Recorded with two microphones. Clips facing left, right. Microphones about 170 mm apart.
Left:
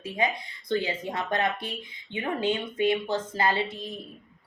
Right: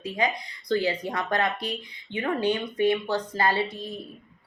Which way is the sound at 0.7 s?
20° left (ahead or behind).